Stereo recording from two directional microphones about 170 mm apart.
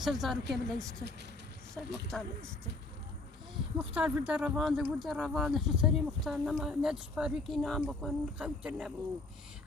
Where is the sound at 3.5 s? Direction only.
5° right (ahead or behind).